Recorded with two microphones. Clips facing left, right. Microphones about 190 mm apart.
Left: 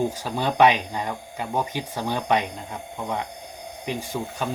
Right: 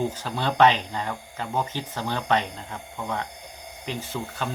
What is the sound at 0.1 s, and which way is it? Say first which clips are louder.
Speech: left 2 dB; 10° left (ahead or behind).